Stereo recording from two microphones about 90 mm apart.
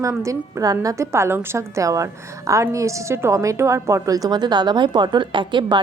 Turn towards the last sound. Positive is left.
turn(degrees=-60)  # may be behind; listen again after turning